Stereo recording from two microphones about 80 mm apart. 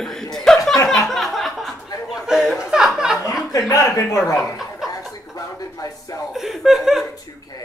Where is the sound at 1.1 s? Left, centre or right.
Centre.